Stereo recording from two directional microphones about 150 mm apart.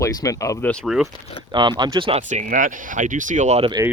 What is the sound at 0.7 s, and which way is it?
Speech, centre (ahead or behind).